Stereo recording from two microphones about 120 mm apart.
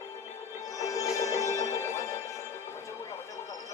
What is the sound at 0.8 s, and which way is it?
Music, 30° left (ahead or behind).